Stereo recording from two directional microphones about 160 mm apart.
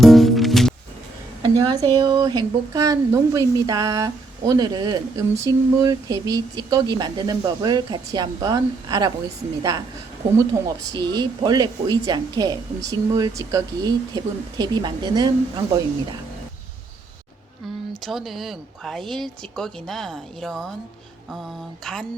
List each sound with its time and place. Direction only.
0.0 s music: centre (ahead or behind)
1.4 s speech: 25° right (ahead or behind)
10.9 s speech: 25° right (ahead or behind)
18.0 s speech: centre (ahead or behind)